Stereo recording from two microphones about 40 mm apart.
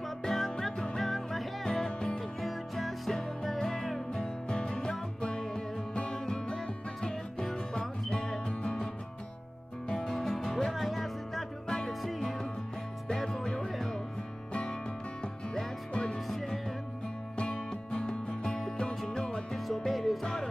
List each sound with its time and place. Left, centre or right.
0.2 s music: centre
1.6 s music: centre
2.4 s music: centre
4.2 s music: left
9.8 s music: centre
13.1 s music: centre
13.7 s music: centre
15.9 s music: left
16.3 s music: centre
17.4 s music: left
19.5 s music: centre